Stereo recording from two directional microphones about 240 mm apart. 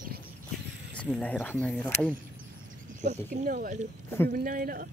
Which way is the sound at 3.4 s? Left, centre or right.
Right.